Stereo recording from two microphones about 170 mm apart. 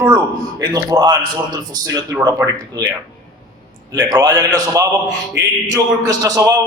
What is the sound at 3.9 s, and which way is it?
A man's voice, 20° right (ahead or behind).